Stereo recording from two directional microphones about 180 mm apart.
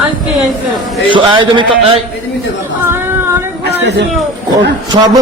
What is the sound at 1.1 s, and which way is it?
Speech, 25° right (ahead or behind).